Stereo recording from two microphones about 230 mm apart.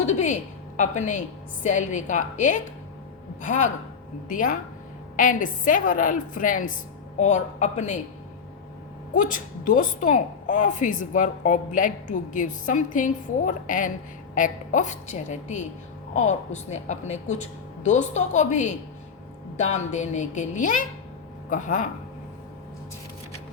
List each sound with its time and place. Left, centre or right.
0.0 s a woman's voice: left
9.1 s a woman's voice: left